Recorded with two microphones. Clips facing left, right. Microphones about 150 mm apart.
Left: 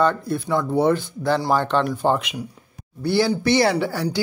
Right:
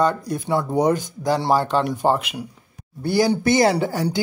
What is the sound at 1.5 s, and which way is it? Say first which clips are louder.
Speech: right 1 dB; 10° right (ahead or behind).